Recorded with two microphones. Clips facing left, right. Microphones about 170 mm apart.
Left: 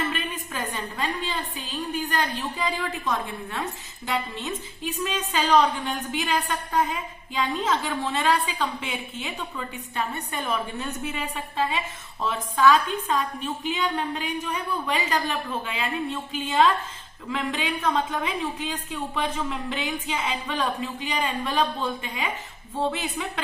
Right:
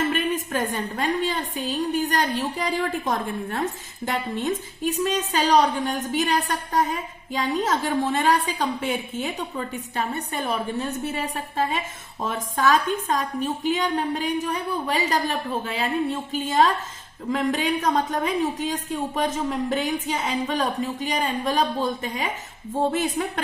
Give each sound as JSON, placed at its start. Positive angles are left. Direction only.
{"t": 0.5, "sound": "a woman's voice", "side_deg": -45}